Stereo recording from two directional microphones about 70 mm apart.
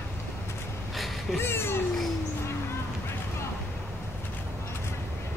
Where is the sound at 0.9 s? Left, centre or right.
Centre.